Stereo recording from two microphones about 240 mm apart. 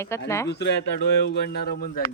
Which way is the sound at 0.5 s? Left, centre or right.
Left.